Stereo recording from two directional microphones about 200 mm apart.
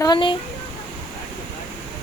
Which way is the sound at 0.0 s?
20° left (ahead or behind).